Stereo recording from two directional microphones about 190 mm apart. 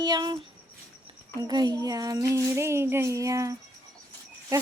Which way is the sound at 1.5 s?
20° right (ahead or behind).